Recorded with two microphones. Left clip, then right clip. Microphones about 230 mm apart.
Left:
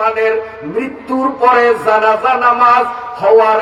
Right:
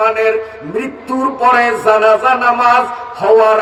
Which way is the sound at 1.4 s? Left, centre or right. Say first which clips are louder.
Even; right.